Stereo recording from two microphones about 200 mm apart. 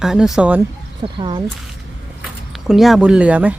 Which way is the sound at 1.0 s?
25° right (ahead or behind).